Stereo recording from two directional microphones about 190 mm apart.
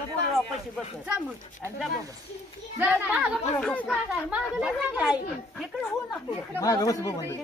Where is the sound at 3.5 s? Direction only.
5° left (ahead or behind).